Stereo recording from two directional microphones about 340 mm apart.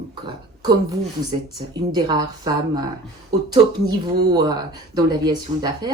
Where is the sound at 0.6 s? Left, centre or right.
Centre.